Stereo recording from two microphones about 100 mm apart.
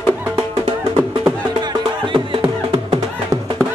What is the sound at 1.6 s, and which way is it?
Music, 60° right (ahead or behind).